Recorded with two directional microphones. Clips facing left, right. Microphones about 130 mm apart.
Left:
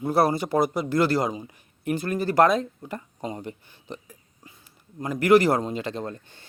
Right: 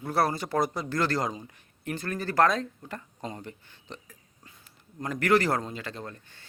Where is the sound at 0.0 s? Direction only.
15° left (ahead or behind).